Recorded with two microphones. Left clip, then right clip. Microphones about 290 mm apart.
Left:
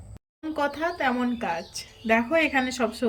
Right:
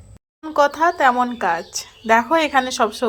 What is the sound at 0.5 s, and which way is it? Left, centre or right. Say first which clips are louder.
Speech: right 11 dB; right.